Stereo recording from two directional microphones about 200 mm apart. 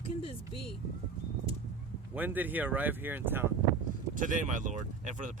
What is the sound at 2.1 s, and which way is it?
Speech, 10° right (ahead or behind).